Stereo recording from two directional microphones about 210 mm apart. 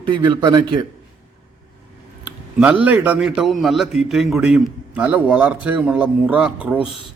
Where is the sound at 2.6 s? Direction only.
5° right (ahead or behind).